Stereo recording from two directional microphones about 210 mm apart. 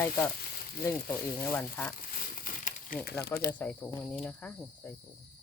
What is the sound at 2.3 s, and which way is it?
Crumpling, 40° left (ahead or behind).